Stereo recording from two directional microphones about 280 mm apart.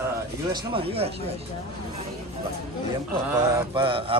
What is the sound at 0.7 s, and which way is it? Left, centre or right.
Speech, centre.